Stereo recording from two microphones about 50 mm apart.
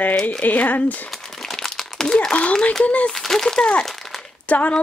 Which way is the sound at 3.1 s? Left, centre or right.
Centre.